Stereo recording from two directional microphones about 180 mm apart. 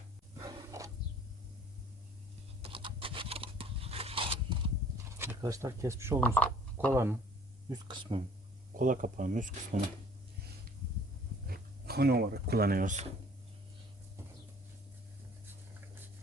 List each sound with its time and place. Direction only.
0.3 s a sound: 20° right (ahead or behind)
2.6 s a sound: 30° right (ahead or behind)
5.1 s speech: 15° right (ahead or behind)
6.1 s speech: 5° left (ahead or behind)
6.9 s speech: 15° right (ahead or behind)
7.7 s speech: 25° right (ahead or behind)
8.7 s speech: 45° right (ahead or behind)
11.4 s speech: 60° right (ahead or behind)